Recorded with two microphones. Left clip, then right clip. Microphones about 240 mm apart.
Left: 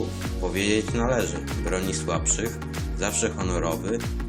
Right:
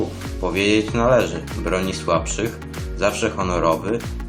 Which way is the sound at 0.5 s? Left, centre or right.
Centre.